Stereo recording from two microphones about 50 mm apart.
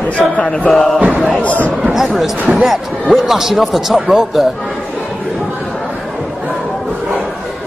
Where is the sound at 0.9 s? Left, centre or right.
Right.